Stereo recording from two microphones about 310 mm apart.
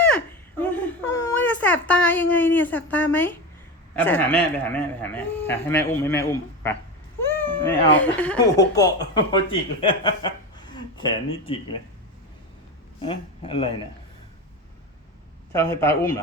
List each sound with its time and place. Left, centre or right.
0.6 s whimper: centre
4.0 s a man's voice: centre
13.0 s a man's voice: centre
15.5 s a man's voice: centre